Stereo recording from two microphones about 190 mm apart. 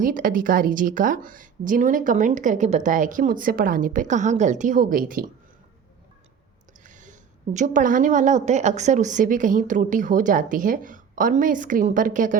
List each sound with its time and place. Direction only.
0.0 s a woman's voice: 45° right (ahead or behind)
6.8 s a woman's voice: 40° right (ahead or behind)